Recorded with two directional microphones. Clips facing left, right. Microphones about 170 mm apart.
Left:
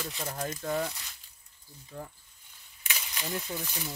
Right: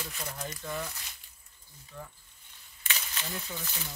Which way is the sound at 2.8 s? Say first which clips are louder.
Left 1 dB; 10° left (ahead or behind).